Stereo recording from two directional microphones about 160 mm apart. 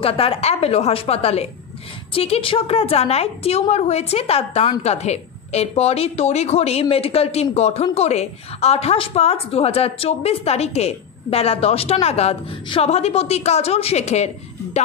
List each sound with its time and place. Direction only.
0.0 s a woman's voice: 35° left (ahead or behind)